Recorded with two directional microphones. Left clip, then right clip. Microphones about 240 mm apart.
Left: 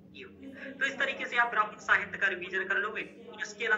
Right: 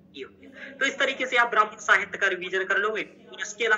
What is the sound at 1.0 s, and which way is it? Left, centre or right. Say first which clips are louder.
A man's voice: right 6 dB; right.